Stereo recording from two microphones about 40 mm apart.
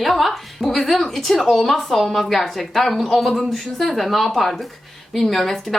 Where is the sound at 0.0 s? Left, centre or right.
Centre.